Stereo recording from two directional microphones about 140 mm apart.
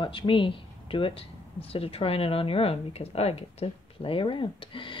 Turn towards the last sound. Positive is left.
turn(degrees=35)  # may be behind; listen again after turning